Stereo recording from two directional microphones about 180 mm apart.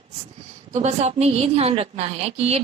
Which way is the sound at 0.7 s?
40° right (ahead or behind).